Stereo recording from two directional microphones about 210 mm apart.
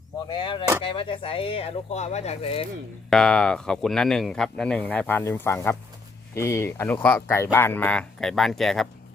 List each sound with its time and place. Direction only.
0.3 s speech: 20° left (ahead or behind)
3.1 s speech: 5° left (ahead or behind)